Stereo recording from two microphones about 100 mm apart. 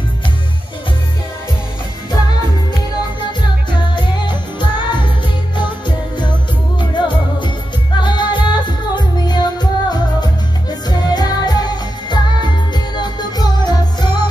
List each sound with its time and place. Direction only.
3.7 s music: 50° left (ahead or behind)